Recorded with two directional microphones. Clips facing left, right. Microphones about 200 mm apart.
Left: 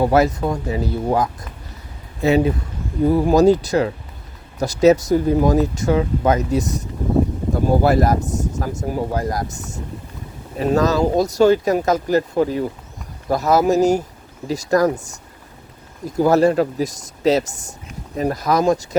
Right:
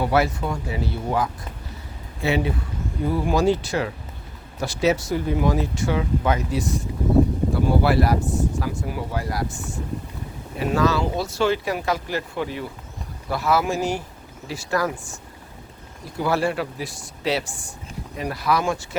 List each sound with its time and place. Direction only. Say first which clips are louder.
0.0 s speech: left 5 dB; 40° left (ahead or behind)
16.1 s speech: left 8 dB; 40° left (ahead or behind)